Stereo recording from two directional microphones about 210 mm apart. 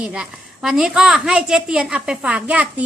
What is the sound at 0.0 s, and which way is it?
A woman's voice, 5° right (ahead or behind).